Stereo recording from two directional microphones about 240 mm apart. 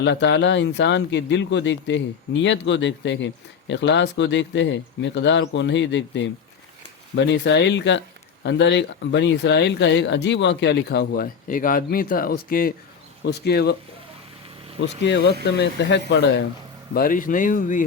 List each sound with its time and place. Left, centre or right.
0.0 s speech: left
15.0 s speech: left
16.9 s speech: left